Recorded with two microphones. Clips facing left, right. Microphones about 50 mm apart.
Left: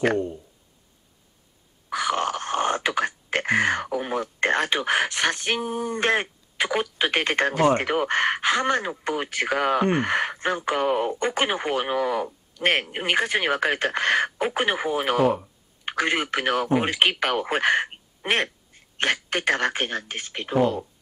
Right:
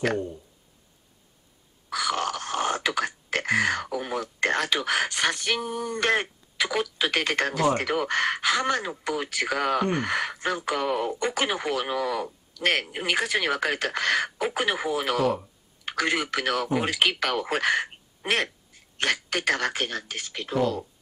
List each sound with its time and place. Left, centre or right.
1.9 s wail: left
6.6 s a man's voice: left